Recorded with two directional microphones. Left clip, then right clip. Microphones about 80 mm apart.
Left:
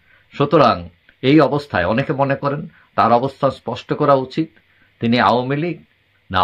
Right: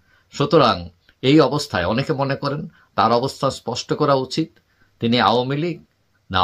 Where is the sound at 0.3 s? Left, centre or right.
Right.